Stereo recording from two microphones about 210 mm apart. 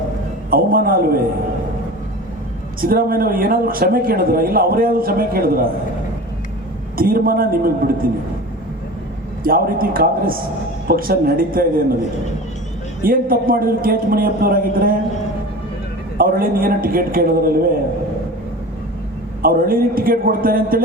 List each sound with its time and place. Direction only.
0.5 s speech: 45° right (ahead or behind)
2.8 s speech: 45° right (ahead or behind)
6.9 s speech: 45° right (ahead or behind)
9.4 s speech: 45° right (ahead or behind)
13.1 s speech: 45° right (ahead or behind)
16.1 s speech: 45° right (ahead or behind)
19.4 s speech: 45° right (ahead or behind)